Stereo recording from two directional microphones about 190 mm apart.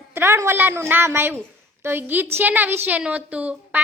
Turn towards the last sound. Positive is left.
turn(degrees=-5)  # may be behind; listen again after turning